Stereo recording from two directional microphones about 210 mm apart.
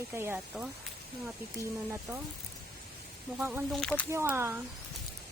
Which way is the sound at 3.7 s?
5° left (ahead or behind).